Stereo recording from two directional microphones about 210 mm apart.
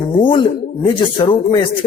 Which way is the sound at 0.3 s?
25° left (ahead or behind).